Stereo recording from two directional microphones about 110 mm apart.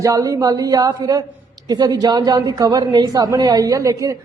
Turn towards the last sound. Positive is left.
turn(degrees=-30)  # may be behind; listen again after turning